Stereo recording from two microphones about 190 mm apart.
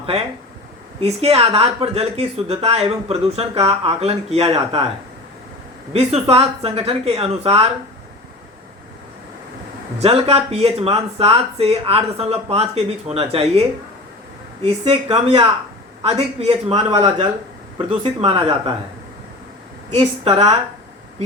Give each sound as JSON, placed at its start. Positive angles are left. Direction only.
{"t": 0.0, "sound": "speech", "side_deg": -30}
{"t": 5.9, "sound": "speech", "side_deg": -35}
{"t": 10.0, "sound": "speech", "side_deg": -30}
{"t": 20.0, "sound": "speech", "side_deg": -30}